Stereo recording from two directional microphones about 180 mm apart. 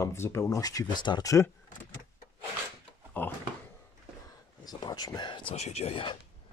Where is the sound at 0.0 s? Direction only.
15° left (ahead or behind).